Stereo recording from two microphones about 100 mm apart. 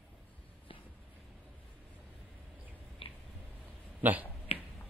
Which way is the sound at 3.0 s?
65° left (ahead or behind).